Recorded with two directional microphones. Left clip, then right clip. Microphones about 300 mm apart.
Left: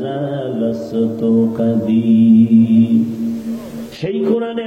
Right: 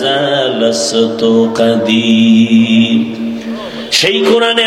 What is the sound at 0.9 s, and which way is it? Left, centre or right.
Music, right.